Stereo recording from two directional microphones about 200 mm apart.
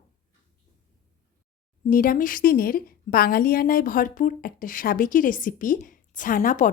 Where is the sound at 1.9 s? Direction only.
45° left (ahead or behind).